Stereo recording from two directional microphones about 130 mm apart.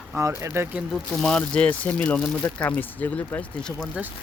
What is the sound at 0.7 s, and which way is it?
Speech, centre (ahead or behind).